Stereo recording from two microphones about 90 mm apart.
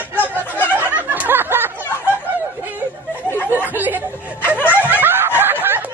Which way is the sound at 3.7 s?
20° right (ahead or behind).